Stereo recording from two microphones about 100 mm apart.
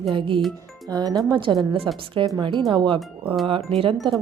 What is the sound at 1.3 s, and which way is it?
Speech, 50° right (ahead or behind).